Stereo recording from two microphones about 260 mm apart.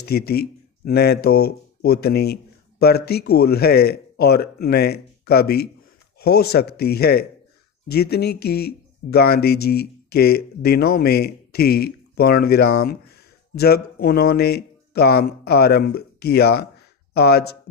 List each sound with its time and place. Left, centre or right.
0.0 s a man's voice: left
14.0 s a man's voice: left